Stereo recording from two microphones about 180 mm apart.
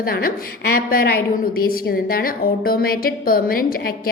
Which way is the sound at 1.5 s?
55° left (ahead or behind).